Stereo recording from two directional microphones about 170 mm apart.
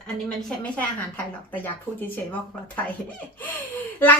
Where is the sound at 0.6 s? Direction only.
10° left (ahead or behind).